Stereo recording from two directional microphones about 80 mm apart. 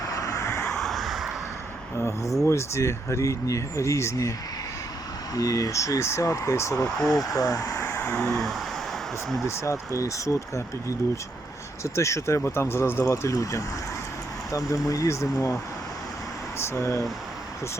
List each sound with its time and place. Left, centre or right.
0.0 s vehicle: left
0.6 s a sound: centre
2.0 s speech: left
6.8 s speech: centre
7.3 s speech: left
8.1 s vehicle: centre
9.6 s speech: left
13.3 s speech: left
16.6 s speech: left